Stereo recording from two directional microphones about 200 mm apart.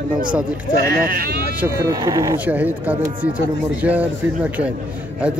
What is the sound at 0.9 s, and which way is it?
Speech, 45° right (ahead or behind).